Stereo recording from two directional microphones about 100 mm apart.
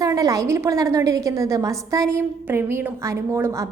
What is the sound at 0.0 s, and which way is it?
A woman's voice, 35° right (ahead or behind).